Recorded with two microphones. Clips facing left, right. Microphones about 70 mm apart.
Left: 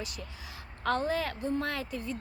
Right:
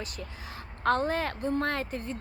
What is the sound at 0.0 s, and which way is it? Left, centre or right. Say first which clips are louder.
Speech: right 2 dB; right.